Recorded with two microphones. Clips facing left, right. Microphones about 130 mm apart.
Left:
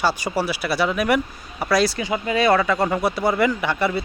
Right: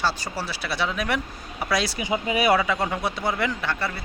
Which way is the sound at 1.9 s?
20° right (ahead or behind).